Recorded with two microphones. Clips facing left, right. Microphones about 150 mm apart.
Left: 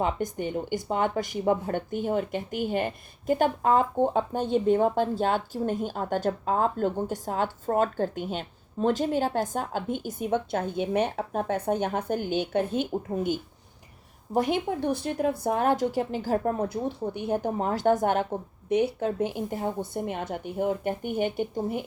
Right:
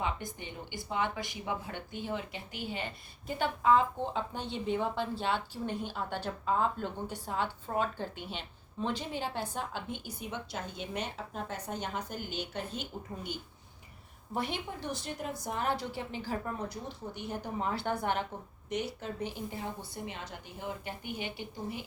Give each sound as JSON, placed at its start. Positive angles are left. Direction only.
{"t": 0.0, "sound": "speech", "side_deg": 50}